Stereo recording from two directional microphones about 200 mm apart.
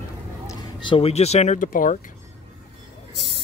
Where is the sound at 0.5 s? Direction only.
20° left (ahead or behind); by 2.0 s 40° left (ahead or behind).